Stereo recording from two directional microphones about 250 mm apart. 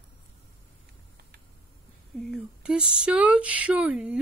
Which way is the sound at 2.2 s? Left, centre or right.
Centre.